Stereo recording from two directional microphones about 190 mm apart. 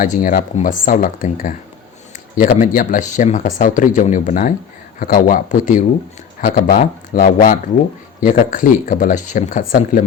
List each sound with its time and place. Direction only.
0.0 s speech: 45° left (ahead or behind)